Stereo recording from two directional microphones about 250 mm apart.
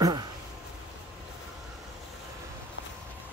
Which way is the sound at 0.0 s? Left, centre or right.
Centre.